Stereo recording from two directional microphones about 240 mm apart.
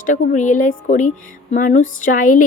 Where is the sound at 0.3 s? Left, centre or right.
Left.